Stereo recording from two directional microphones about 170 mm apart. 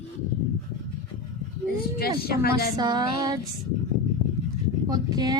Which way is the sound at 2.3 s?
65° left (ahead or behind).